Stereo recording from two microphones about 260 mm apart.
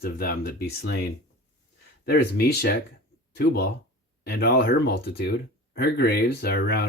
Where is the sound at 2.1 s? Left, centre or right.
Left.